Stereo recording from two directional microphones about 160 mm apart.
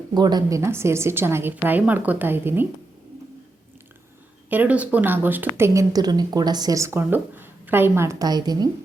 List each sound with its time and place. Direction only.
0.1 s speech: 25° right (ahead or behind)
4.4 s speech: 10° right (ahead or behind)